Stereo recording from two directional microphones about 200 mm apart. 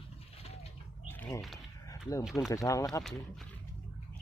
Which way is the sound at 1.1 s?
10° left (ahead or behind).